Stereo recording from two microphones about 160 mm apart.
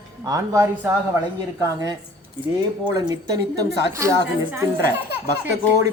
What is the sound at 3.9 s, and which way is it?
Speech, 20° right (ahead or behind).